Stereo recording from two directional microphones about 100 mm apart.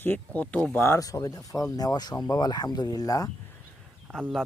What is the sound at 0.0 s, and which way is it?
Speech, 15° left (ahead or behind).